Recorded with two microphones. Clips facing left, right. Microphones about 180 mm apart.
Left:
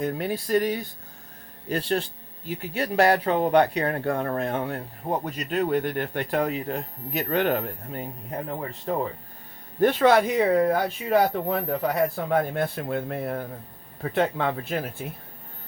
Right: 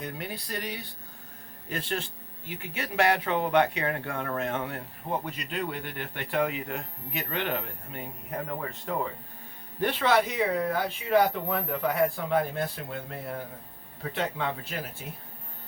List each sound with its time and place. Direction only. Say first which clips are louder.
0.0 s speech: left 9 dB; 45° left (ahead or behind)
1.7 s speech: left 7 dB; 35° left (ahead or behind)
8.9 s speech: left 5 dB; 35° left (ahead or behind)
9.8 s speech: left 6 dB; 45° left (ahead or behind)